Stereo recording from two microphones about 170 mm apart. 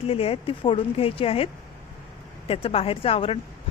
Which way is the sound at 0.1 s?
35° left (ahead or behind).